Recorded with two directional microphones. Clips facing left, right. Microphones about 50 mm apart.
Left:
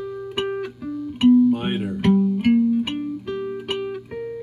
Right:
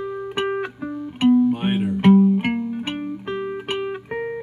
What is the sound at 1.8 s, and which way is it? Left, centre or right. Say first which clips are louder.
Music: right 7 dB; right.